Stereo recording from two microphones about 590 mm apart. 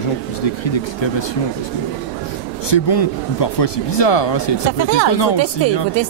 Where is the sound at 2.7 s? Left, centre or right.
Left.